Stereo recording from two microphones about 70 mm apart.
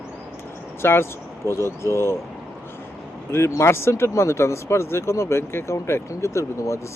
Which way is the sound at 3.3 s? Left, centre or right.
Left.